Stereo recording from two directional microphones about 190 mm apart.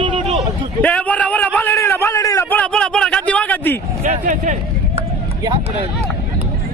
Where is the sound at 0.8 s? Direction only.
10° left (ahead or behind).